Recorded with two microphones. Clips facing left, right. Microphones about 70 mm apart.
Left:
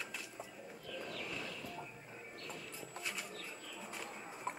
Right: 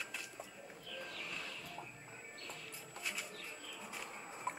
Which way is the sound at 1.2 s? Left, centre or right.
Centre.